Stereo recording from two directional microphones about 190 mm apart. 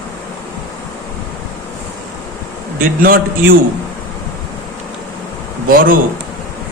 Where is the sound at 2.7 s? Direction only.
50° right (ahead or behind).